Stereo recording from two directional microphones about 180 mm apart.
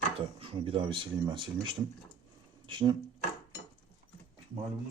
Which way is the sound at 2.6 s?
25° right (ahead or behind).